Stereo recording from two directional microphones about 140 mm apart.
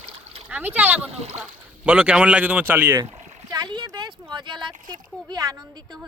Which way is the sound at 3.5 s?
30° right (ahead or behind).